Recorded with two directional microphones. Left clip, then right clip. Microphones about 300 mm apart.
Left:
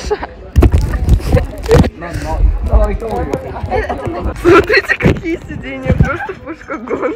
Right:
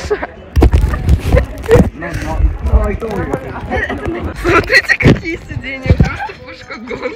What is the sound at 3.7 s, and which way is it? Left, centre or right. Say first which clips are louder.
Speech: left 1 dB; centre.